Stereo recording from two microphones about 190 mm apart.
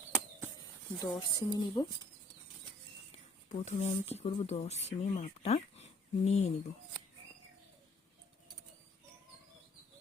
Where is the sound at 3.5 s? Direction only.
35° left (ahead or behind).